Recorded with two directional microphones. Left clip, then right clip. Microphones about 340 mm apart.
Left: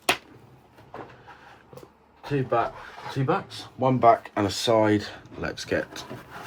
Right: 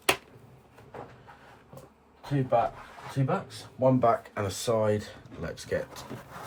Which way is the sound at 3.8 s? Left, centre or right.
Left.